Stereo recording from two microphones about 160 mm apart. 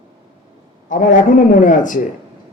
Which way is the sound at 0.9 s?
55° left (ahead or behind).